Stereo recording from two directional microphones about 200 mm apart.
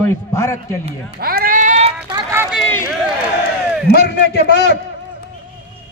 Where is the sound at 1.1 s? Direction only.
50° right (ahead or behind).